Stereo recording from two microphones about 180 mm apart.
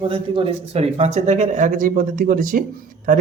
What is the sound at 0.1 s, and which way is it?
Speech, 30° right (ahead or behind).